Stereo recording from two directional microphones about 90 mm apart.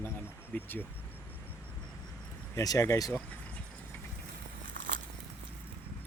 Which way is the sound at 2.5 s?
40° left (ahead or behind).